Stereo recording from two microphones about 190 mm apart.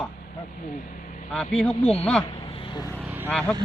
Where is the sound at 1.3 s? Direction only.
5° left (ahead or behind).